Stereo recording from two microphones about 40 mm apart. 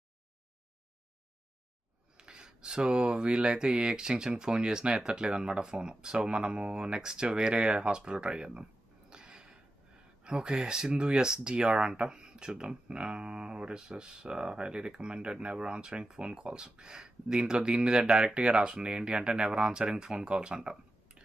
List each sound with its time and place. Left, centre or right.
2.1 s speech: right
9.0 s a sound: right
10.2 s speech: right